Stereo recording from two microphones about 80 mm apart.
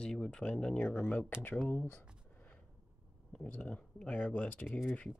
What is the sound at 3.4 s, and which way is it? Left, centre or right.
Speech, centre.